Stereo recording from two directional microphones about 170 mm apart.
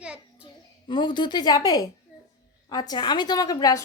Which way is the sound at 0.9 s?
25° left (ahead or behind).